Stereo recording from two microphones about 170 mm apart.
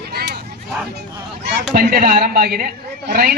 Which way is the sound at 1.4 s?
85° right.